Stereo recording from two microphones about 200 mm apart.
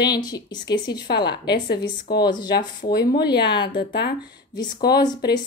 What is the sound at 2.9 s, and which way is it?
Speech, 55° left (ahead or behind).